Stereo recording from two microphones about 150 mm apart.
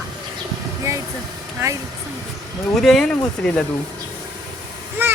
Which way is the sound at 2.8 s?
5° left (ahead or behind).